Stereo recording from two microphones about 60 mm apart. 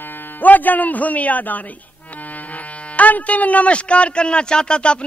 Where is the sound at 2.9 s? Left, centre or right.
Left.